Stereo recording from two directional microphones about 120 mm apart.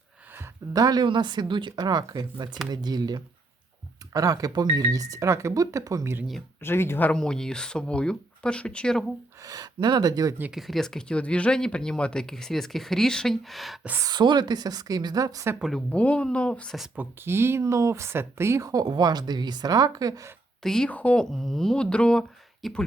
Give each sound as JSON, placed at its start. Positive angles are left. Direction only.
{"t": 0.7, "sound": "speech", "side_deg": -30}
{"t": 6.6, "sound": "speech", "side_deg": 20}
{"t": 7.2, "sound": "speech", "side_deg": 5}
{"t": 9.4, "sound": "speech", "side_deg": -30}
{"t": 10.5, "sound": "speech", "side_deg": 0}
{"t": 14.0, "sound": "speech", "side_deg": -35}
{"t": 15.5, "sound": "speech", "side_deg": -5}
{"t": 15.9, "sound": "speech", "side_deg": 10}
{"t": 16.9, "sound": "speech", "side_deg": -15}
{"t": 20.6, "sound": "speech", "side_deg": 5}